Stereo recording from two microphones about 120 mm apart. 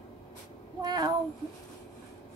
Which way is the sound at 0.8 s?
35° right (ahead or behind).